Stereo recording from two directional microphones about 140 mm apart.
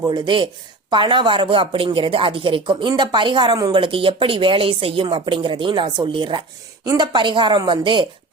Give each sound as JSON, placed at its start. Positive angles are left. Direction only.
{"t": 0.0, "sound": "speech", "side_deg": -30}